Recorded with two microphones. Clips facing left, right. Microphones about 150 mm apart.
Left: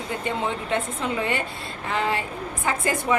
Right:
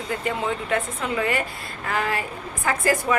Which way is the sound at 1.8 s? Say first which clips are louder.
Even; 25° left (ahead or behind).